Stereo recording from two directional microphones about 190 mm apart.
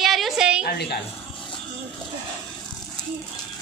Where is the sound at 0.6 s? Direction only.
60° left (ahead or behind).